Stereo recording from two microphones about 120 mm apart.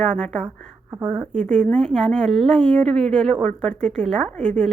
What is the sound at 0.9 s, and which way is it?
Speech, 20° right (ahead or behind).